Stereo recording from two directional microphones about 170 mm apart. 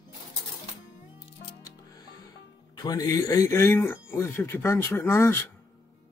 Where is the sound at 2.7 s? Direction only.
20° left (ahead or behind).